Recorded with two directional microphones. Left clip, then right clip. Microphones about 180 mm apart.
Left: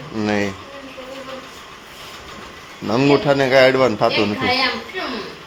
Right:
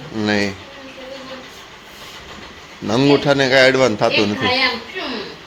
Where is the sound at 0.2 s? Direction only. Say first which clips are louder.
Right 2 dB; centre (ahead or behind).